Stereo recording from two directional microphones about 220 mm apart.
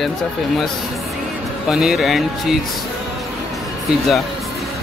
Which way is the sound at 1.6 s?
Centre (ahead or behind).